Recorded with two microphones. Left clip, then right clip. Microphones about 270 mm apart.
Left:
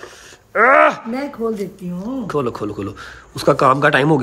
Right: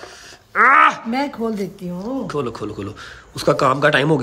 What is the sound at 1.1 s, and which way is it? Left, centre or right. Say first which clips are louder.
Speech: even; right.